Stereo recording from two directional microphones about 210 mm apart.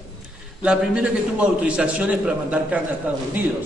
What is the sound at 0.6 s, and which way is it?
A man's voice, 5° right (ahead or behind).